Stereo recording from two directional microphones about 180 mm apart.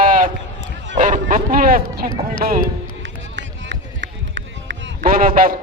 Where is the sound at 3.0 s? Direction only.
90° right.